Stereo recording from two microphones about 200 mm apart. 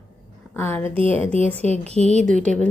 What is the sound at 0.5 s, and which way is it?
Speech, 10° left (ahead or behind).